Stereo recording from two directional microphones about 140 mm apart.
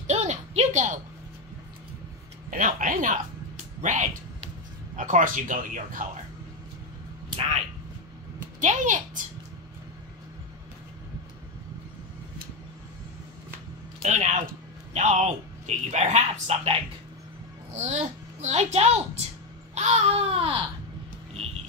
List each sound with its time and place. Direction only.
0.0 s a sound: 55° right (ahead or behind)
2.5 s speech: 75° right (ahead or behind)
3.8 s speech: 60° right (ahead or behind)
8.5 s a child's voice: 65° right (ahead or behind)
14.0 s speech: 60° right (ahead or behind)
17.7 s a child's voice: 55° right (ahead or behind)